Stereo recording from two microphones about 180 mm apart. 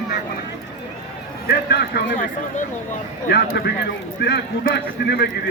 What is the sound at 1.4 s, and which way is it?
Speech, 65° left (ahead or behind).